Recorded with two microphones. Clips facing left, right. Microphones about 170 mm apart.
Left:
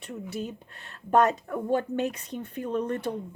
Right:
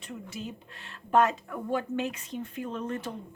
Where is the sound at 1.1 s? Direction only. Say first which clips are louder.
Left 2 dB; 40° left (ahead or behind).